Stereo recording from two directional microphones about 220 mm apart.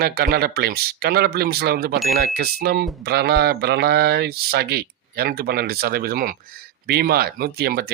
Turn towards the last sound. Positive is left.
turn(degrees=-45)  # may be behind; listen again after turning